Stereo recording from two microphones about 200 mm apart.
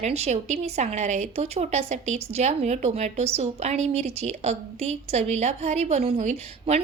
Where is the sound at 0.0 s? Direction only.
35° right (ahead or behind).